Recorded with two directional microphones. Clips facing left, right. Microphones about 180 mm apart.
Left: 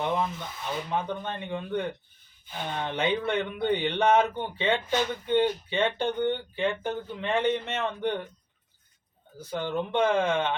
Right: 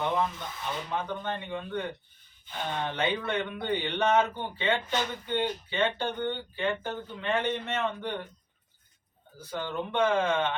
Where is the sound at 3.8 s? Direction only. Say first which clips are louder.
Left 2 dB; 15° left (ahead or behind).